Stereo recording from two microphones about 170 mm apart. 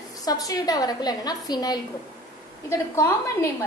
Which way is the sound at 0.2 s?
20° left (ahead or behind).